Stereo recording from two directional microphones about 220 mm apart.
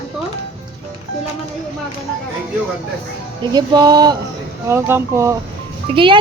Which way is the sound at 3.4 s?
20° right (ahead or behind).